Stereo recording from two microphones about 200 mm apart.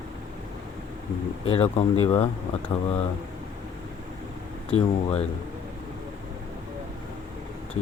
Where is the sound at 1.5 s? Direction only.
30° left (ahead or behind).